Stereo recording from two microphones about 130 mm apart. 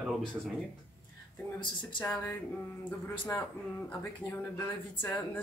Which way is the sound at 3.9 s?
15° left (ahead or behind).